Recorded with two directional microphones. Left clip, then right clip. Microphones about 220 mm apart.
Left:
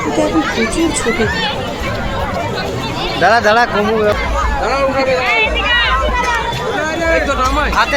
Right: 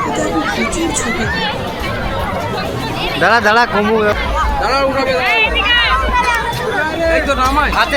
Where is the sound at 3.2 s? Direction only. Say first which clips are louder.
Even; 15° right (ahead or behind).